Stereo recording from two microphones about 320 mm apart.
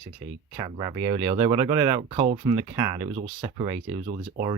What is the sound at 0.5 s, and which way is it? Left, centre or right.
Speech, centre.